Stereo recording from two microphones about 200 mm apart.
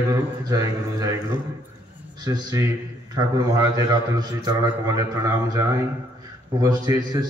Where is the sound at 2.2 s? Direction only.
20° right (ahead or behind).